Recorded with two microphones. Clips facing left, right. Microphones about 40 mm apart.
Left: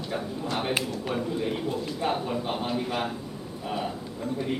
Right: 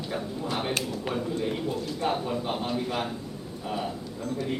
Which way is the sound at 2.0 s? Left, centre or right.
Centre.